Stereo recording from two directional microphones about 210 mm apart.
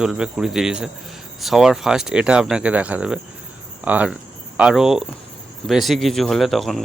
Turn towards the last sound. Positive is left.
turn(degrees=0)  # may be behind; listen again after turning